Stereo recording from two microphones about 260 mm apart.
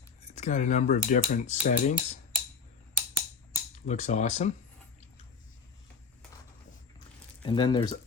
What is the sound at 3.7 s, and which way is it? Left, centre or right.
Speech, left.